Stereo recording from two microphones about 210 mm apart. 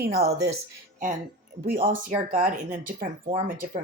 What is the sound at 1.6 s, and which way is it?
Speech, 45° right (ahead or behind).